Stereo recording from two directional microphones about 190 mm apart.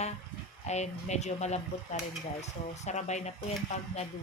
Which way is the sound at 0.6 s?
35° left (ahead or behind).